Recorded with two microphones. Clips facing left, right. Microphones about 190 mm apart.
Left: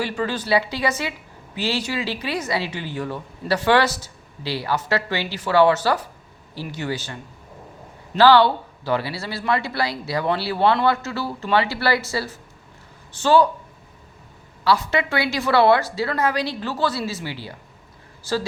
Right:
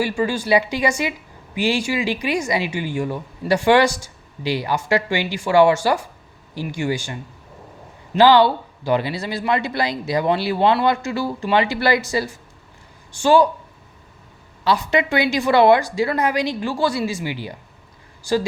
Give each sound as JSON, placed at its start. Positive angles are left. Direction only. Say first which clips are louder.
{"t": 0.0, "sound": "speech", "louder": "right 4 dB", "side_deg": -10}
{"t": 14.6, "sound": "speech", "louder": "right 1 dB", "side_deg": -20}